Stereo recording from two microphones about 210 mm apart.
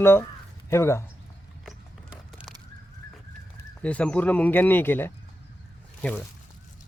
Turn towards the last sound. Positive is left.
turn(degrees=5)  # may be behind; listen again after turning